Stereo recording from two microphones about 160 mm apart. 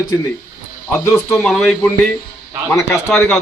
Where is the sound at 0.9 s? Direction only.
15° left (ahead or behind).